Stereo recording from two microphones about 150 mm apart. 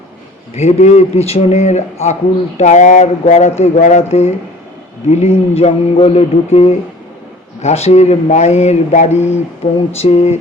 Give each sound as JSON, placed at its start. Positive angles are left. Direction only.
{"t": 0.5, "sound": "speech", "side_deg": 45}